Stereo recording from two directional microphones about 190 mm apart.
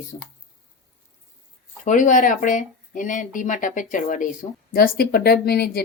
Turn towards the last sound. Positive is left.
turn(degrees=55)  # may be behind; listen again after turning